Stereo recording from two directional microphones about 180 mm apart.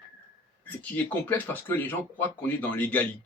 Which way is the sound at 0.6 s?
10° left (ahead or behind).